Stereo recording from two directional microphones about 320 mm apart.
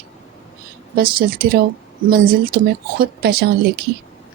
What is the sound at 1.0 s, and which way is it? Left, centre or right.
Speech, right.